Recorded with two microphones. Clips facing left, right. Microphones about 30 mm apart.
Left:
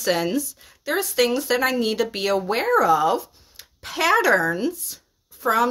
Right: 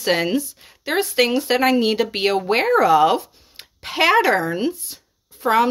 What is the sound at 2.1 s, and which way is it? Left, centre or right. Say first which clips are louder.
Speech: right 4 dB; right.